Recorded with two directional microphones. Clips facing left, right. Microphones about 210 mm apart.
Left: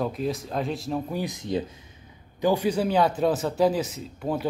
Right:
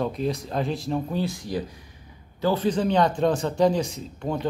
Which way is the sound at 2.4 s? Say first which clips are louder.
Even; 15° left (ahead or behind).